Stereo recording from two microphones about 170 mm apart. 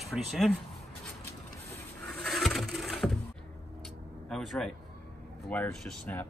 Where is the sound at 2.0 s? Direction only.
Centre (ahead or behind).